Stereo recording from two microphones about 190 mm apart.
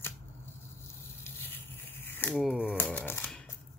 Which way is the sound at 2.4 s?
5° right (ahead or behind).